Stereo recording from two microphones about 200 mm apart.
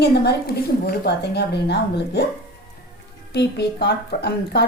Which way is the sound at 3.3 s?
55° left (ahead or behind).